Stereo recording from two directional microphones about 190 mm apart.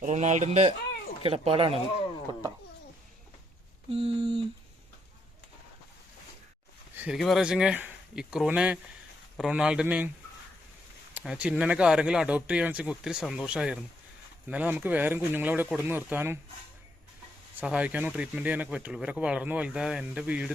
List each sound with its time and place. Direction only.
0.0 s speech: 40° right (ahead or behind)
3.8 s speech: 30° right (ahead or behind)
6.9 s speech: 5° right (ahead or behind)
11.1 s speech: 5° right (ahead or behind)
17.6 s speech: 10° right (ahead or behind)